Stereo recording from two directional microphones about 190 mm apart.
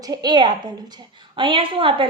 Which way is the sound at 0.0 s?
20° right (ahead or behind).